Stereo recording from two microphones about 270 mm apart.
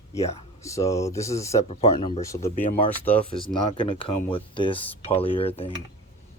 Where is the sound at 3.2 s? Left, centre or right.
Right.